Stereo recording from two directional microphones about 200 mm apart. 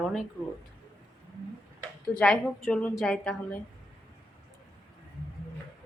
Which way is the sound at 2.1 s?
5° left (ahead or behind).